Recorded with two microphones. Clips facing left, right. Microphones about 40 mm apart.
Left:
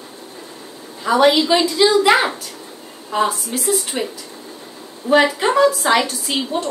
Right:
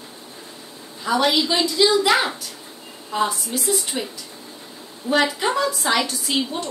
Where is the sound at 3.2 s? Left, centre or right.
Centre.